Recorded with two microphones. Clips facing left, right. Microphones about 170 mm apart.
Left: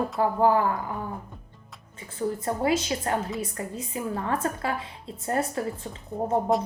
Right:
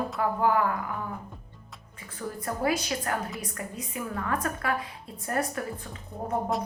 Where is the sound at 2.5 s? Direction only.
25° left (ahead or behind).